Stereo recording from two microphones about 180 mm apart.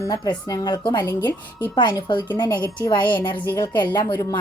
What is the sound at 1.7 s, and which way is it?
Speech, 25° left (ahead or behind).